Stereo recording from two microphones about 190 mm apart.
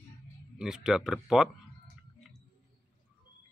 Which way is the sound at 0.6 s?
5° right (ahead or behind).